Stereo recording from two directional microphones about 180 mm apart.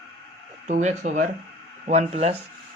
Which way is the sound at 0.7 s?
40° right (ahead or behind).